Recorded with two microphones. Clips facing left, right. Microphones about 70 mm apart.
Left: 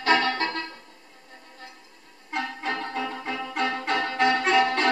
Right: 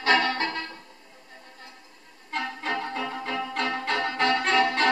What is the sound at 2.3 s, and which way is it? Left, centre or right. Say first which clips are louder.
Music: even; centre.